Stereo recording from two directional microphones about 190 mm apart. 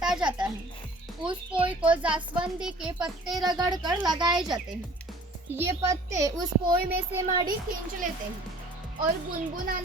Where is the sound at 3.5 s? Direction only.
20° right (ahead or behind).